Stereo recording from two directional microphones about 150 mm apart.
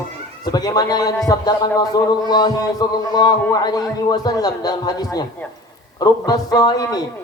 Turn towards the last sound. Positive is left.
turn(degrees=25)  # may be behind; listen again after turning